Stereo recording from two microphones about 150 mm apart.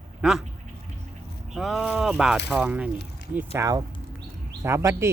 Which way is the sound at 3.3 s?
15° right (ahead or behind).